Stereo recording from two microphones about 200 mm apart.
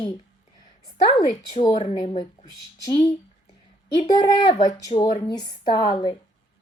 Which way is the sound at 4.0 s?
20° left (ahead or behind).